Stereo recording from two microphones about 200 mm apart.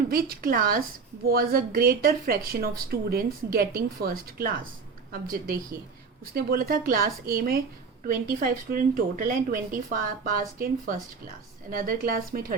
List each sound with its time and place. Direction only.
0.1 s speech: 50° right (ahead or behind)